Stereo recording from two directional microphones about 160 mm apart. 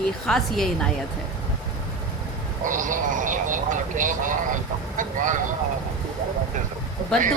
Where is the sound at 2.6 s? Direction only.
55° right (ahead or behind).